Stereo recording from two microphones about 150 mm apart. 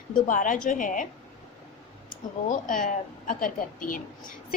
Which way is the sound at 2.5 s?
60° left (ahead or behind).